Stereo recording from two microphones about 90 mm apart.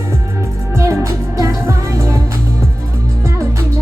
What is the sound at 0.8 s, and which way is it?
Music, 35° right (ahead or behind).